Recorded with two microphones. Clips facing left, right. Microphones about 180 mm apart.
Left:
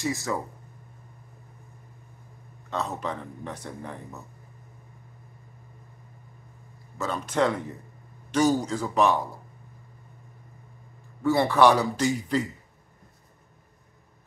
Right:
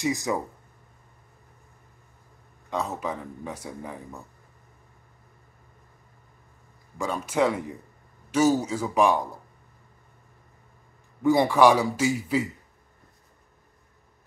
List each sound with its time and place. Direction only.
0.0 s speech: 15° right (ahead or behind)
2.7 s speech: 10° right (ahead or behind)
7.0 s speech: 10° right (ahead or behind)
11.2 s speech: 15° right (ahead or behind)